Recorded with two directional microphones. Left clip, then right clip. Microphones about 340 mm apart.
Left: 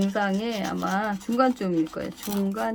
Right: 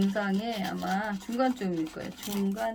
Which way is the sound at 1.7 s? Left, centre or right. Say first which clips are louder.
Left 7 dB; centre.